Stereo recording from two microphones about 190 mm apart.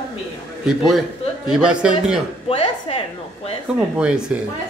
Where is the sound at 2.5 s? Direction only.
30° left (ahead or behind).